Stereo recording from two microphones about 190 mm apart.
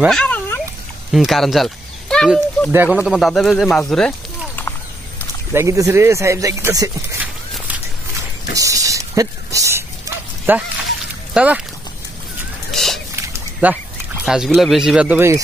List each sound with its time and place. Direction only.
0.0 s a sound: 5° left (ahead or behind)
1.1 s speech: centre (ahead or behind)
2.7 s speech: 10° right (ahead or behind)
5.5 s speech: 15° right (ahead or behind)
8.5 s dog: 15° right (ahead or behind)
11.3 s speech: 5° right (ahead or behind)
12.7 s a sound: centre (ahead or behind)
13.1 s a sound: 10° right (ahead or behind)
14.2 s speech: centre (ahead or behind)